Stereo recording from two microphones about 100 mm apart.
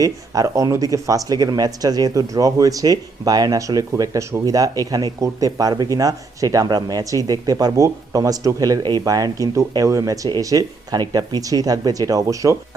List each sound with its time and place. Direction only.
0.0 s speech: 35° right (ahead or behind)